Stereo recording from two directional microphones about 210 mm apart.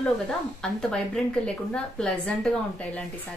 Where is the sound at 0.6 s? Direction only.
5° left (ahead or behind).